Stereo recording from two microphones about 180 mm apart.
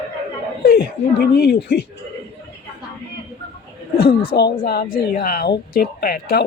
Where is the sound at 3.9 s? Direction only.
60° left (ahead or behind).